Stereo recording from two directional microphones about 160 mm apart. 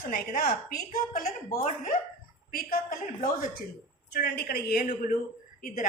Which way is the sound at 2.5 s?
65° left (ahead or behind).